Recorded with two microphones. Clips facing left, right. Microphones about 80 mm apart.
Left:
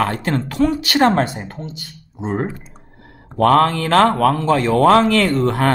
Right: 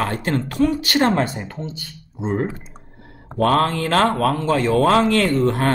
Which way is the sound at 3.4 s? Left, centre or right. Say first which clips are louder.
Left 4 dB; left.